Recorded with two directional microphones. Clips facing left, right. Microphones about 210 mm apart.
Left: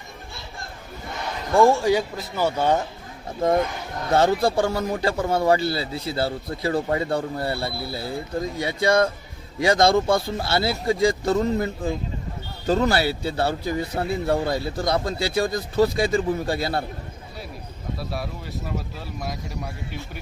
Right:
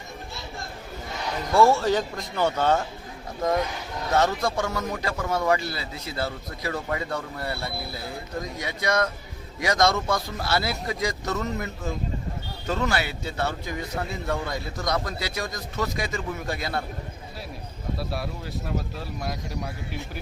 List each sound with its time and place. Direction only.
1.5 s speech: 15° left (ahead or behind)
4.1 s a man's voice: 30° left (ahead or behind)
17.9 s speech: centre (ahead or behind)